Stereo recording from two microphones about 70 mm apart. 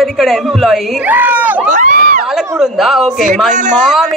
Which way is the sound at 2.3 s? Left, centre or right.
Centre.